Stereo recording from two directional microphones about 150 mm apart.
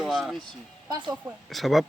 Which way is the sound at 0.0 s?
Centre (ahead or behind).